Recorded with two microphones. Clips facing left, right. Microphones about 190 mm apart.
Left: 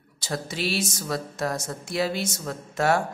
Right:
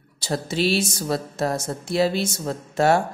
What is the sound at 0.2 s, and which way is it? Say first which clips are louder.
A man's voice: right 6 dB; 30° right (ahead or behind).